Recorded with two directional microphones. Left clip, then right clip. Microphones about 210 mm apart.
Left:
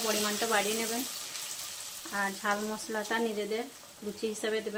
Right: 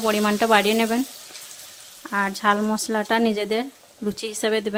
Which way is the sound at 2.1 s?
50° right (ahead or behind).